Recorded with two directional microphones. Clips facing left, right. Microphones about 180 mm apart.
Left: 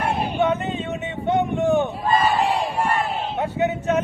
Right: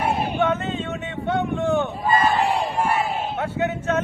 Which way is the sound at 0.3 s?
15° left (ahead or behind).